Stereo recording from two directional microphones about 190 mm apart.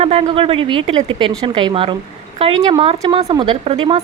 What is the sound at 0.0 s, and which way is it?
Speech, 30° right (ahead or behind).